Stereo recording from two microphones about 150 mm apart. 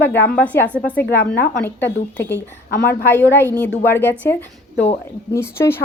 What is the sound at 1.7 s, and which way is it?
Speech, 15° left (ahead or behind).